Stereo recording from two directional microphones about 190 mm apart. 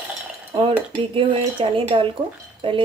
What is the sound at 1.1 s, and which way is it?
Speech, 30° right (ahead or behind).